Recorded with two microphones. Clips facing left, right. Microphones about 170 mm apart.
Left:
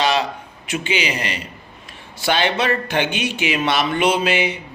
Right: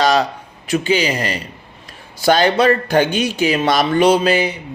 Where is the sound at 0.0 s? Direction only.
40° right (ahead or behind).